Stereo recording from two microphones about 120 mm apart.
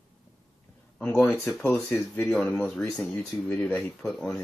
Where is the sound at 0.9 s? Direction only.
10° left (ahead or behind).